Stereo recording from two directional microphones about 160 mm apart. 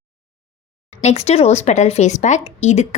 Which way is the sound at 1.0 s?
40° left (ahead or behind).